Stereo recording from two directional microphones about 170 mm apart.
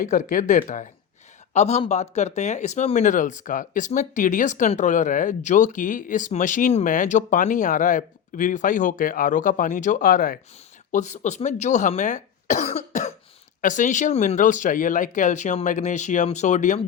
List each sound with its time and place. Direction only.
0.0 s speech: 50° left (ahead or behind)
10.9 s speech: 45° left (ahead or behind)